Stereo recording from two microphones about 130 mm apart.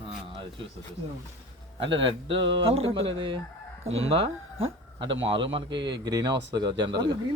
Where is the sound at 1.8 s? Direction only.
45° right (ahead or behind).